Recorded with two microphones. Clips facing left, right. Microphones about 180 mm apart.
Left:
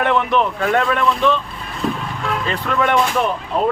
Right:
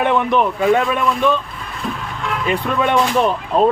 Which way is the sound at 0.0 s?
15° right (ahead or behind).